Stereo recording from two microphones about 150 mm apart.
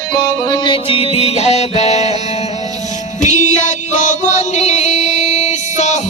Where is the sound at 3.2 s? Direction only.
55° left (ahead or behind).